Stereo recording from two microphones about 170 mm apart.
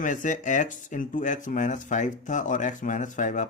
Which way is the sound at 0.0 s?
50° left (ahead or behind).